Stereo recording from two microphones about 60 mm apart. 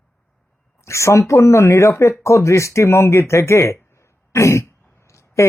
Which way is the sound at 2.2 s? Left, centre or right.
Left.